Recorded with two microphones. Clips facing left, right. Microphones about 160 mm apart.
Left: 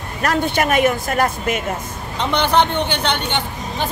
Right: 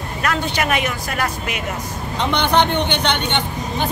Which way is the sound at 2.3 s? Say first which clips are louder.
Left 1 dB; 5° left (ahead or behind).